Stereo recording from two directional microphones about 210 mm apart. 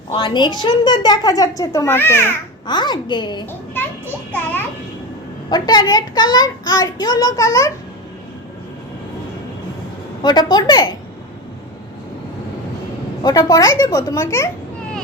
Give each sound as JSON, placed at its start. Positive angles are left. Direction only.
{"t": 0.1, "sound": "a woman's voice", "side_deg": 25}
{"t": 3.8, "sound": "children playing", "side_deg": 10}
{"t": 5.5, "sound": "a woman's voice", "side_deg": 20}
{"t": 10.2, "sound": "a woman's voice", "side_deg": 20}
{"t": 13.2, "sound": "a woman's voice", "side_deg": 15}